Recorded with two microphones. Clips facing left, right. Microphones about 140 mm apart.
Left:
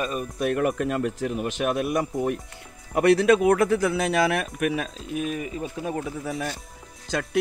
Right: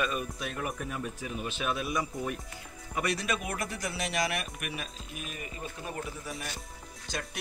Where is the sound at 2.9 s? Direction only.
90° left.